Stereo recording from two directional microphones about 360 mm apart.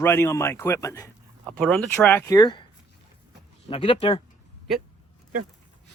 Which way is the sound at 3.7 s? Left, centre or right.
Centre.